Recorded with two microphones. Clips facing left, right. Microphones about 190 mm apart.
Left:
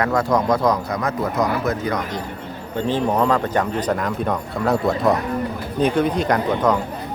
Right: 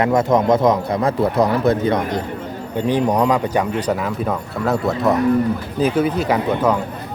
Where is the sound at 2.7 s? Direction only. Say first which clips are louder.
Right 2 dB; 15° right (ahead or behind).